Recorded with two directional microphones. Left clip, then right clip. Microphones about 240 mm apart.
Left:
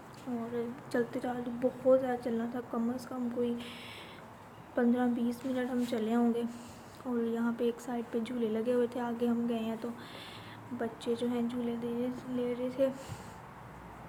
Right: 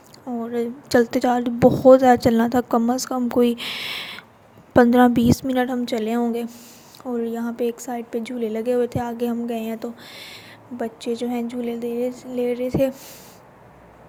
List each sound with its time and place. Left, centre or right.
0.5 s a woman's voice: right